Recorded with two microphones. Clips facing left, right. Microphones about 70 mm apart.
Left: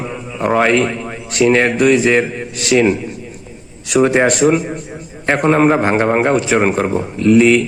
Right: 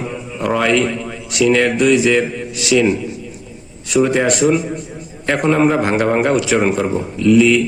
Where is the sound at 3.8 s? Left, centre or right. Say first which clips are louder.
Left 2 dB; left.